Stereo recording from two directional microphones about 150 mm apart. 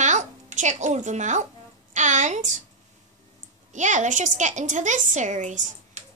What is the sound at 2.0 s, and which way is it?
Speech, 55° right (ahead or behind).